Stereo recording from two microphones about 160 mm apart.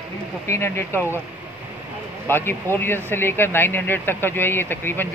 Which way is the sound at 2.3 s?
15° left (ahead or behind).